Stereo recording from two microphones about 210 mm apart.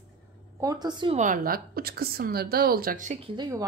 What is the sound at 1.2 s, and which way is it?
Speech, 40° right (ahead or behind).